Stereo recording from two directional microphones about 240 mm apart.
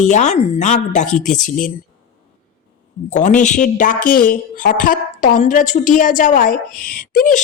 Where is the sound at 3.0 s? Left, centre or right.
Left.